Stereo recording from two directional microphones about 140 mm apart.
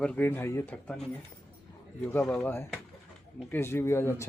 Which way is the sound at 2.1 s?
15° left (ahead or behind).